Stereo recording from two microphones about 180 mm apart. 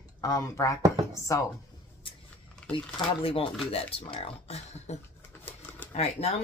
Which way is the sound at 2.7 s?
30° left (ahead or behind).